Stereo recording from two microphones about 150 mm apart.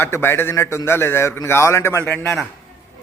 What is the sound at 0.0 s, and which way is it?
A man's voice, 15° left (ahead or behind).